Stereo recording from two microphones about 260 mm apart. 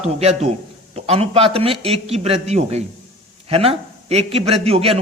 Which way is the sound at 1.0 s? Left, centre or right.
Right.